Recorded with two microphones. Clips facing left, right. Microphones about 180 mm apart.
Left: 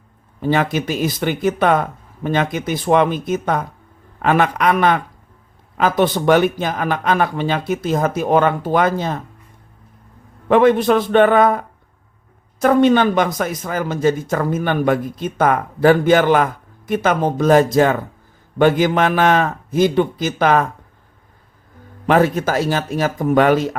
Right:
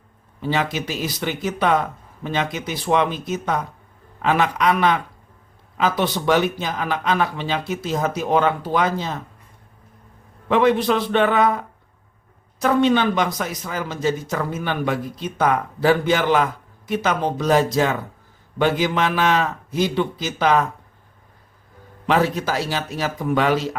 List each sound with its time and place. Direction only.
0.3 s speech: 50° left (ahead or behind)
10.5 s speech: 50° left (ahead or behind)
22.0 s speech: 50° left (ahead or behind)